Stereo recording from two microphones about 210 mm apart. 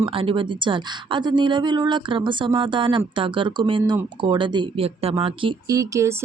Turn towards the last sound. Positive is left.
turn(degrees=-15)  # may be behind; listen again after turning